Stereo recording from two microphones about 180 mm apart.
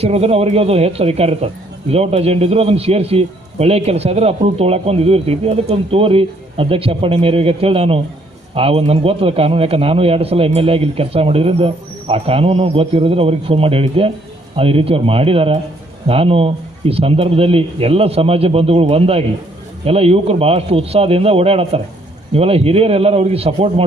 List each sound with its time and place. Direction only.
0.0 s a man's voice: 35° right (ahead or behind)